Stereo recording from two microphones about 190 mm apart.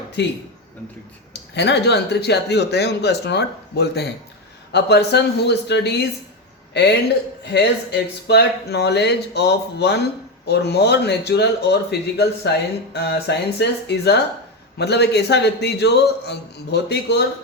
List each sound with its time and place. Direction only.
0.2 s speech: 65° left (ahead or behind)
7.4 s speech: 60° left (ahead or behind)